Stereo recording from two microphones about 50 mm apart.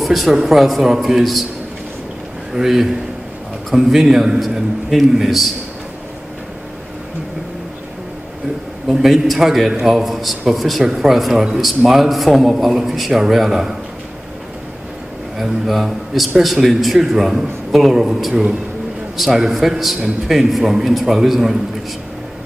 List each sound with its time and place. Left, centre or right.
0.0 s a man's voice: centre
2.5 s a man's voice: centre
8.8 s a man's voice: centre
15.3 s a man's voice: centre